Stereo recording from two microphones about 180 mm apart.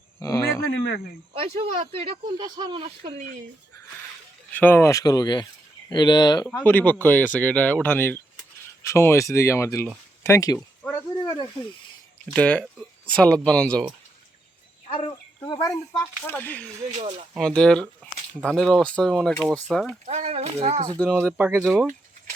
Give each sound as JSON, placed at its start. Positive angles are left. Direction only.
{"t": 0.2, "sound": "a sound", "side_deg": 15}
{"t": 1.3, "sound": "speech", "side_deg": -30}
{"t": 4.5, "sound": "speech", "side_deg": 10}
{"t": 6.5, "sound": "speech", "side_deg": 10}
{"t": 12.3, "sound": "speech", "side_deg": 5}
{"t": 14.8, "sound": "speech", "side_deg": 25}
{"t": 15.5, "sound": "speech", "side_deg": 15}
{"t": 20.1, "sound": "speech", "side_deg": -35}
{"t": 21.3, "sound": "speech", "side_deg": -10}
{"t": 21.6, "sound": "speech", "side_deg": 0}